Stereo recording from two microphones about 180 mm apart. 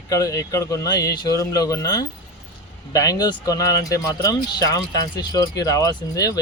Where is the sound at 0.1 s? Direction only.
20° left (ahead or behind).